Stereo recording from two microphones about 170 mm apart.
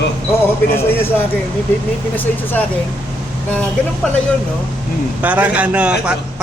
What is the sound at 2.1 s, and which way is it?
Speech, 10° left (ahead or behind).